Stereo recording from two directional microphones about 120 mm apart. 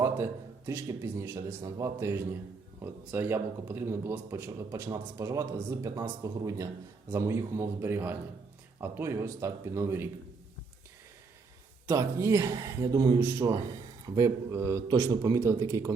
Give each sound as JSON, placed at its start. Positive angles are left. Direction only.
{"t": 0.0, "sound": "speech", "side_deg": -20}
{"t": 11.9, "sound": "speech", "side_deg": -20}
{"t": 14.8, "sound": "speech", "side_deg": -30}